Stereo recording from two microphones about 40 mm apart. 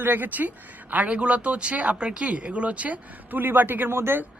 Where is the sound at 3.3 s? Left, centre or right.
Right.